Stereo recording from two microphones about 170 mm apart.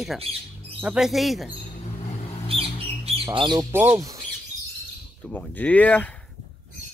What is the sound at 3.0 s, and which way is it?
Bird, 35° right (ahead or behind).